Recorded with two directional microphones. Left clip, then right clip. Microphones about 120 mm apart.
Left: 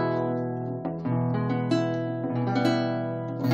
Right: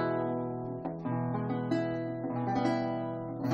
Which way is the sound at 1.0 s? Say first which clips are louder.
Left 5 dB; 25° left (ahead or behind).